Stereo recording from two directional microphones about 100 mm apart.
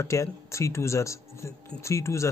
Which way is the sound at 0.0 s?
30° left (ahead or behind).